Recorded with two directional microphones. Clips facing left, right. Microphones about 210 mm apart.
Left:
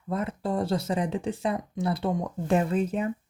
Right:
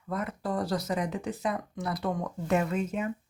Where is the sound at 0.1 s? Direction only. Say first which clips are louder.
Left 3 dB; 25° left (ahead or behind).